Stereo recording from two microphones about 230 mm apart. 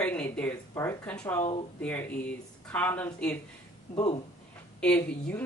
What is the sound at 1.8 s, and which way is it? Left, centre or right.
A woman's voice, centre.